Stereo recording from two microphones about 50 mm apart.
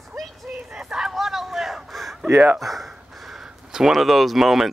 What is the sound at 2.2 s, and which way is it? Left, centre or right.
Speech, right.